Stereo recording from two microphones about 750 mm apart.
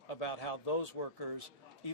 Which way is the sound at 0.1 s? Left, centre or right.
Left.